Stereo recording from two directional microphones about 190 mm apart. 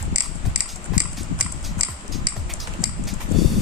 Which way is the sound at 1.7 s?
25° right (ahead or behind).